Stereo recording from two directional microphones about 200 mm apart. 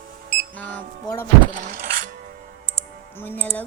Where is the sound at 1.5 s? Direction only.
40° right (ahead or behind).